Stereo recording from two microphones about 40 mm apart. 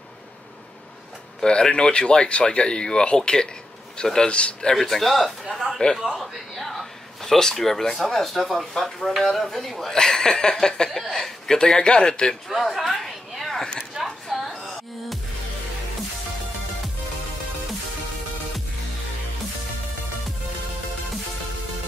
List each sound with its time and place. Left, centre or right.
1.4 s speech: left
4.0 s chuckle: centre
4.3 s speech: left
4.7 s a man's voice: centre
9.5 s chuckle: centre
10.9 s speech: centre
12.4 s a man's voice: centre
13.0 s a sound: centre